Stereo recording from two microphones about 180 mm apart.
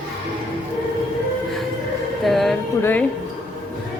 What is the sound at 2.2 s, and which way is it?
Speech, centre (ahead or behind).